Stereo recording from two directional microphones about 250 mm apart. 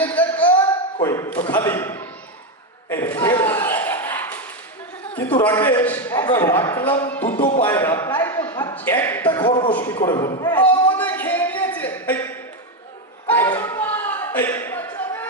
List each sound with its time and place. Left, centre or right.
0.0 s a sound: centre
1.4 s a man's voice: centre
2.9 s chuckle: centre
5.4 s a man's voice: centre
7.3 s speech: centre
7.6 s a man's voice: centre
11.0 s a sound: centre